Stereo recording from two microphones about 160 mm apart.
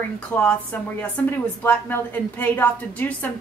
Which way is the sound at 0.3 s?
10° left (ahead or behind).